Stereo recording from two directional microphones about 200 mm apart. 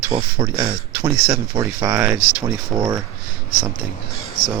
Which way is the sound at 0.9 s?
15° right (ahead or behind).